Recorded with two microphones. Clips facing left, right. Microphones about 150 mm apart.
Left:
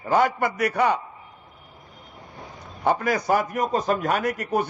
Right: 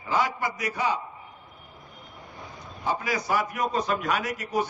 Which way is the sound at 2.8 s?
55° left (ahead or behind).